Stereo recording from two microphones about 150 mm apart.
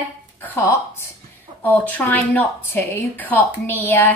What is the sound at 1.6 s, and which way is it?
A woman's voice, 10° left (ahead or behind).